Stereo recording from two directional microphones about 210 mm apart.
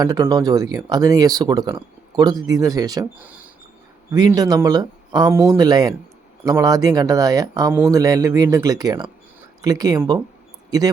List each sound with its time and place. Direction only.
0.0 s speech: 15° right (ahead or behind)
4.1 s speech: 20° right (ahead or behind)